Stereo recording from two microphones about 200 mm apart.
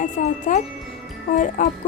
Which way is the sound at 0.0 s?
40° left (ahead or behind).